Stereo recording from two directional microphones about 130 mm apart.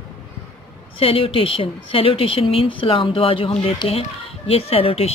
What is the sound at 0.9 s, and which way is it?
A woman's voice, 45° left (ahead or behind).